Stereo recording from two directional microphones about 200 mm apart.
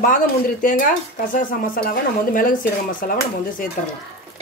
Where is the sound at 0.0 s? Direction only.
40° left (ahead or behind).